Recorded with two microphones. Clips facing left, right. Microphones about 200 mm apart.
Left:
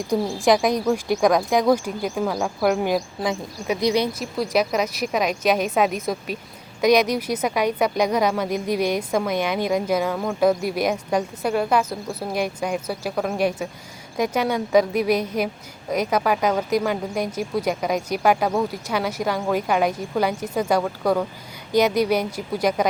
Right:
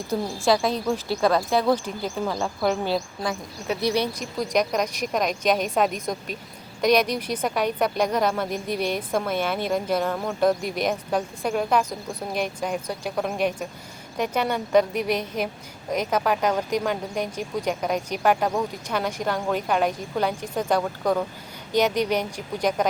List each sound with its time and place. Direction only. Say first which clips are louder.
0.1 s speech: left 3 dB; 15° left (ahead or behind)